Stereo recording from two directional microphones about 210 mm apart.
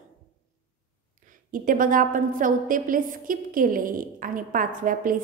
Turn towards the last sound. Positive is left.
turn(degrees=-40)  # may be behind; listen again after turning